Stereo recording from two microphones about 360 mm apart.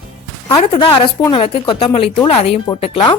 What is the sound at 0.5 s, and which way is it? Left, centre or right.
Speech, centre.